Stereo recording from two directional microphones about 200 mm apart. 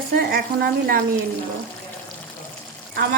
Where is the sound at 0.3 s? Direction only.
50° right (ahead or behind).